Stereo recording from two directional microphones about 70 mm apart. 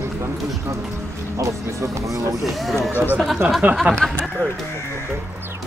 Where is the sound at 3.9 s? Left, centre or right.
Right.